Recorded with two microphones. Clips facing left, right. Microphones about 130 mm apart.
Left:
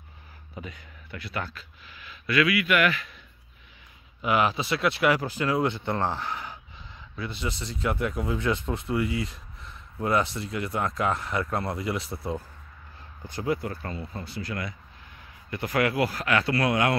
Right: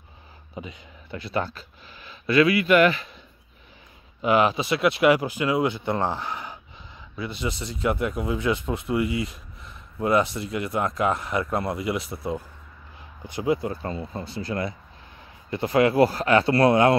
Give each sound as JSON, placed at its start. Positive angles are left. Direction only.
{"t": 0.6, "sound": "speech", "side_deg": -20}
{"t": 4.2, "sound": "speech", "side_deg": -25}